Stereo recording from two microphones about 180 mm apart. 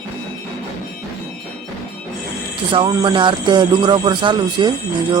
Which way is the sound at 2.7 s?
25° right (ahead or behind).